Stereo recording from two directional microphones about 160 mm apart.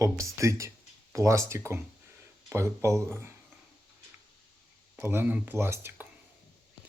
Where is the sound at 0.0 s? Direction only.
20° right (ahead or behind).